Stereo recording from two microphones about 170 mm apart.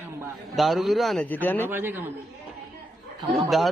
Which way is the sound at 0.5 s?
Centre (ahead or behind).